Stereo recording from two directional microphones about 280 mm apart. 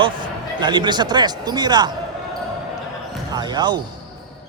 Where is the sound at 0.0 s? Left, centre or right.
Centre.